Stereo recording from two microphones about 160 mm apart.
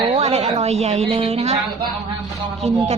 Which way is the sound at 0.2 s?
45° right (ahead or behind).